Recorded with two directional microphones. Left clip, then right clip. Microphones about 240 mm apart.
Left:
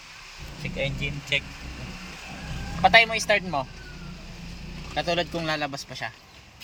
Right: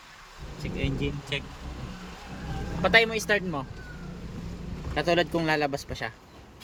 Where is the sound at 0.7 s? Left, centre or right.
Centre.